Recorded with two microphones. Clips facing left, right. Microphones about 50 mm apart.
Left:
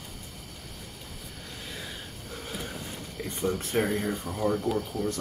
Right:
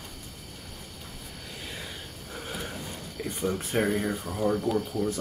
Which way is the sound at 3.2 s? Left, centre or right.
Centre.